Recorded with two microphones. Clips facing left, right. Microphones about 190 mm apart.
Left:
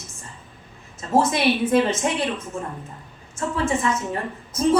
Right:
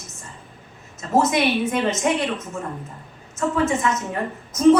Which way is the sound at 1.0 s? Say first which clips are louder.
Right 1 dB; 30° left (ahead or behind).